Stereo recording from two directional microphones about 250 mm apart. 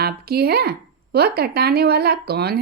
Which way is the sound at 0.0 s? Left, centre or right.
Right.